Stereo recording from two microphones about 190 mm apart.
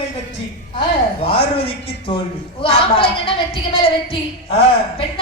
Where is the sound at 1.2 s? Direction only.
30° left (ahead or behind).